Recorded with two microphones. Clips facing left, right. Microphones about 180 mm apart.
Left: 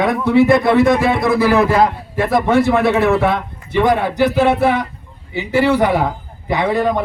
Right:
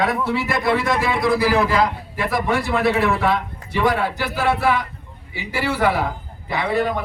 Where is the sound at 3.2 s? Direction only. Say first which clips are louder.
Left 4 dB; 55° left (ahead or behind).